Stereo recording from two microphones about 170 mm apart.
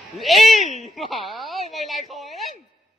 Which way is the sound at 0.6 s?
40° left (ahead or behind).